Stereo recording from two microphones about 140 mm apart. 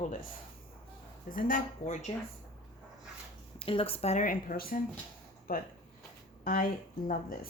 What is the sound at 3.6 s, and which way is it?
A woman's voice, 40° left (ahead or behind).